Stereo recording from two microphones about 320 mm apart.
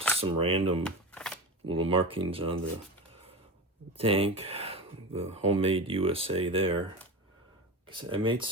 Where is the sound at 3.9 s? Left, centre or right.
Centre.